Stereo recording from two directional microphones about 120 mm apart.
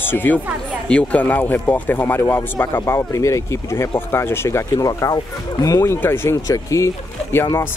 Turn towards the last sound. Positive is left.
turn(degrees=20)  # may be behind; listen again after turning